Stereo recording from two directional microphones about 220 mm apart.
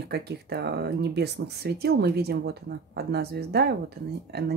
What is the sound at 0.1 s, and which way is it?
Speech, 45° right (ahead or behind).